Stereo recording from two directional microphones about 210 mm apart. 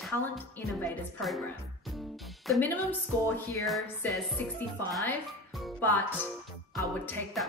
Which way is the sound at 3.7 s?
Centre (ahead or behind).